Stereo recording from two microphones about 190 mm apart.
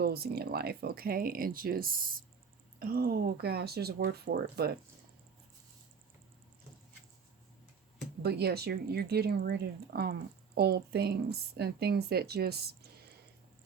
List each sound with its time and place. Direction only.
0.0 s speech: 55° right (ahead or behind)
8.2 s speech: 55° right (ahead or behind)